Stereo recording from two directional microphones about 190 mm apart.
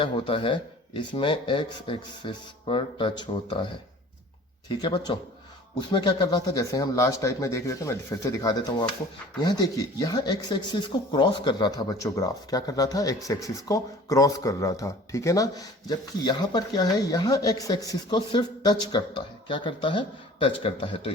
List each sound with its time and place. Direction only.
0.0 s speech: 30° left (ahead or behind)
4.7 s speech: 25° left (ahead or behind)